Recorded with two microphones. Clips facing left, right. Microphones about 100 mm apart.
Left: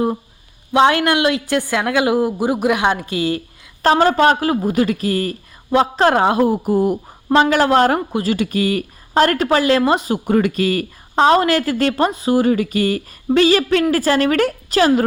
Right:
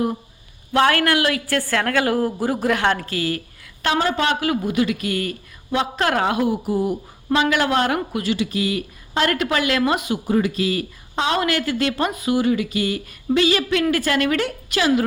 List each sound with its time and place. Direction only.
0.7 s a woman's voice: 20° left (ahead or behind)
3.8 s speech: 40° left (ahead or behind)
10.2 s a woman's voice: 60° left (ahead or behind); by 14.3 s 35° left (ahead or behind)
14.3 s a woman's voice: 45° left (ahead or behind)